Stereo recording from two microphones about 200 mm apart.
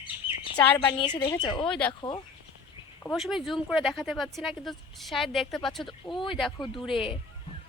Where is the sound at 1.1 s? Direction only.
25° left (ahead or behind).